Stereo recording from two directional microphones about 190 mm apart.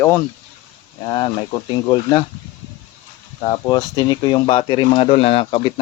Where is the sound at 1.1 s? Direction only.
25° left (ahead or behind).